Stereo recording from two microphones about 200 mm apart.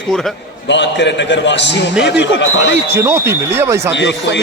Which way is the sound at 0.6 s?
60° left (ahead or behind).